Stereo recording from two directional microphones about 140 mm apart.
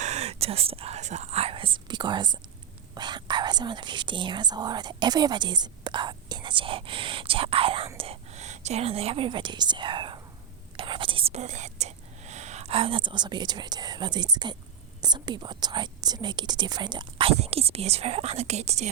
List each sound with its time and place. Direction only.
0.0 s speech: 50° right (ahead or behind)